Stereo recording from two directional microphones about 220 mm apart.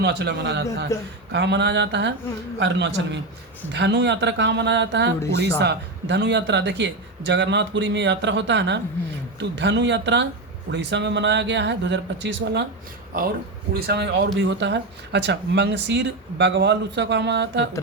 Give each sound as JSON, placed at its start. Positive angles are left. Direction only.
{"t": 0.0, "sound": "speech", "side_deg": -50}
{"t": 13.7, "sound": "speech", "side_deg": -45}